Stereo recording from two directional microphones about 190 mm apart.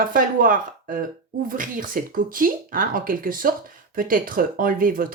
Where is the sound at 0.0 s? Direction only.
45° right (ahead or behind).